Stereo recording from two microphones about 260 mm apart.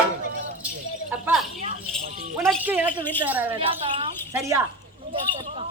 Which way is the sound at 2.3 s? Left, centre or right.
Centre.